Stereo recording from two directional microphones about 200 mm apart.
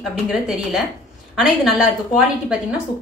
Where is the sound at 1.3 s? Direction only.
Centre (ahead or behind).